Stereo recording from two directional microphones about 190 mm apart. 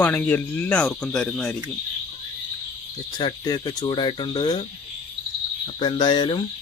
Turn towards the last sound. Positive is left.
turn(degrees=25)  # may be behind; listen again after turning